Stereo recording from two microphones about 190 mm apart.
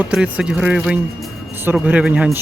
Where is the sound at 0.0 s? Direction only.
5° right (ahead or behind).